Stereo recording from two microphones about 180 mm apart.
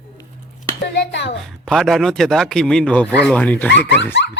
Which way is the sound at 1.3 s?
Centre (ahead or behind).